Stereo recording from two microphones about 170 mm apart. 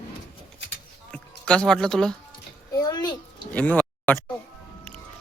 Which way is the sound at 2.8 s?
25° left (ahead or behind).